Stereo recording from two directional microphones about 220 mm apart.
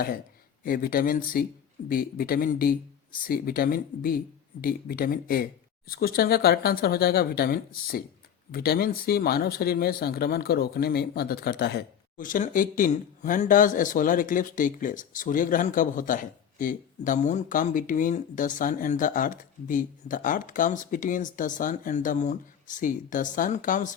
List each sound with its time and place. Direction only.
0.6 s speech: 40° left (ahead or behind)